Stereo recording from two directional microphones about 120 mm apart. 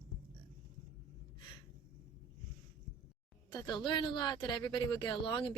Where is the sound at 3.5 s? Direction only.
35° left (ahead or behind).